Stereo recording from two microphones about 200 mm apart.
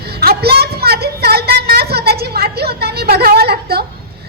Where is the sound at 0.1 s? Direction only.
50° right (ahead or behind).